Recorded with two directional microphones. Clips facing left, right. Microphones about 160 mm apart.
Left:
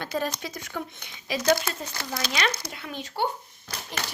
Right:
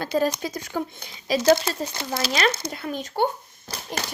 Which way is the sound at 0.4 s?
35° right (ahead or behind).